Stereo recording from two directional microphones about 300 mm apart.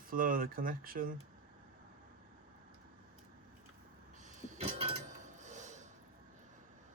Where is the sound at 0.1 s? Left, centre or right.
Right.